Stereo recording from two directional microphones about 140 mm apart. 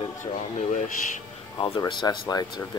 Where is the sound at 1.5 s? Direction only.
30° left (ahead or behind).